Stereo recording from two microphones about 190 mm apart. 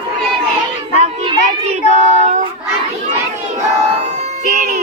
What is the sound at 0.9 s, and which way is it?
Children playing, 35° right (ahead or behind).